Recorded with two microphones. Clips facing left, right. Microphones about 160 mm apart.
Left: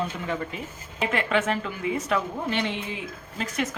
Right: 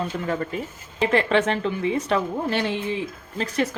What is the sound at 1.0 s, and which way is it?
A woman's voice, 30° right (ahead or behind).